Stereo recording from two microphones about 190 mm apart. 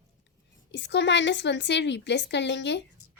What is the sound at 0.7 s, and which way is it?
Speech, 65° left (ahead or behind).